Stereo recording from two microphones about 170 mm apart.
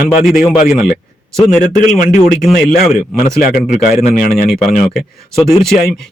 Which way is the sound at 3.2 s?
45° left (ahead or behind).